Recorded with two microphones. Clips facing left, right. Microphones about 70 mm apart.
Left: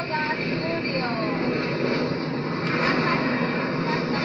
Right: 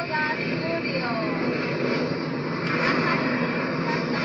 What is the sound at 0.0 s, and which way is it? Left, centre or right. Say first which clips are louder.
Vehicle: even; centre.